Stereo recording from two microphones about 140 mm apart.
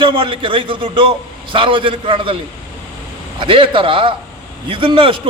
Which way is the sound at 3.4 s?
40° right (ahead or behind).